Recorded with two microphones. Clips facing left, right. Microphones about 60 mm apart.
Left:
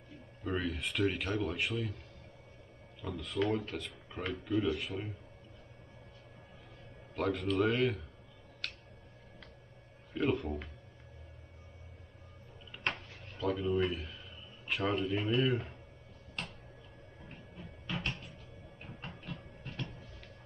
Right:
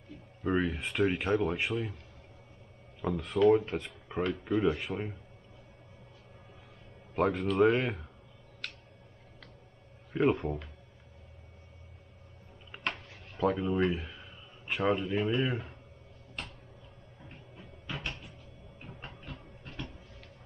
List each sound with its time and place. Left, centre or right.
0.4 s speech: centre
3.0 s speech: right
7.2 s speech: right
10.1 s speech: right
12.7 s a sound: right
13.4 s speech: right
17.3 s music: centre
18.8 s train: centre